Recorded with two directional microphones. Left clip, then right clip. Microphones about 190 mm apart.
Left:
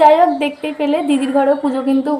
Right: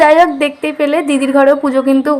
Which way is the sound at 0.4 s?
40° right (ahead or behind).